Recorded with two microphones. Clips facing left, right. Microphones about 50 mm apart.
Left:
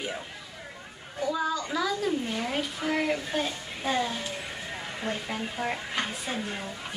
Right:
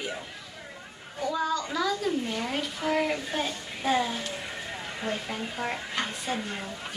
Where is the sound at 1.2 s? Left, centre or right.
Centre.